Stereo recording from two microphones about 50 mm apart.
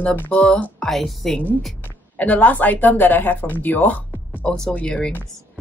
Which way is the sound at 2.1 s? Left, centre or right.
Left.